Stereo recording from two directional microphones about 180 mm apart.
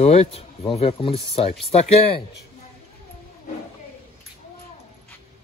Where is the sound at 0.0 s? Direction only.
35° left (ahead or behind).